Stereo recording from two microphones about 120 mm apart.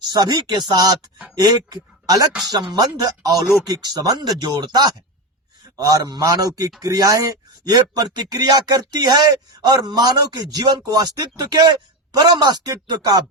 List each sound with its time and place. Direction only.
0.1 s a man's voice: 35° right (ahead or behind)